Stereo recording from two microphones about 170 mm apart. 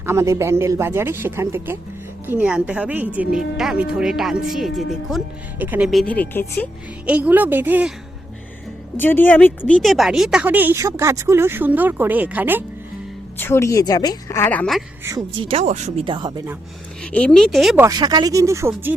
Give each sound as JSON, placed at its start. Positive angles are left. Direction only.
{"t": 0.0, "sound": "speech", "side_deg": -15}
{"t": 5.9, "sound": "a woman's voice", "side_deg": 5}
{"t": 7.0, "sound": "speech", "side_deg": -10}
{"t": 9.0, "sound": "speech", "side_deg": 10}
{"t": 13.4, "sound": "a woman's voice", "side_deg": 15}
{"t": 15.4, "sound": "speech", "side_deg": -35}
{"t": 16.0, "sound": "speech", "side_deg": -25}
{"t": 17.0, "sound": "speech", "side_deg": 10}
{"t": 17.7, "sound": "speech", "side_deg": -20}